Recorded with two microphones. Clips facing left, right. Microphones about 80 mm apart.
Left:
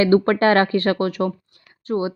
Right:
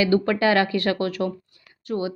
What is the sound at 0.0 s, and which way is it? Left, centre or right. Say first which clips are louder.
A woman's voice: left 4 dB; left.